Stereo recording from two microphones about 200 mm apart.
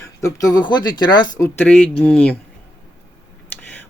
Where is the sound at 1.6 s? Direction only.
5° left (ahead or behind).